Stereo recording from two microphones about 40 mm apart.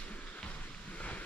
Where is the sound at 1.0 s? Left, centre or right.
Left.